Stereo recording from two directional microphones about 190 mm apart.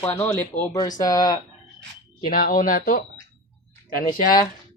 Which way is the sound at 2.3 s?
45° left (ahead or behind).